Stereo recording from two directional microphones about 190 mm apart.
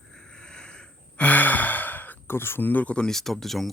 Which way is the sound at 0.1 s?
5° left (ahead or behind).